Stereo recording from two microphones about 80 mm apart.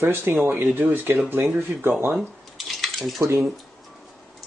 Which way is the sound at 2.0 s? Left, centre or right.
Centre.